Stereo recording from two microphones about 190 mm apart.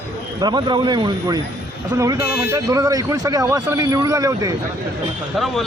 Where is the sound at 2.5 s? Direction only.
15° right (ahead or behind).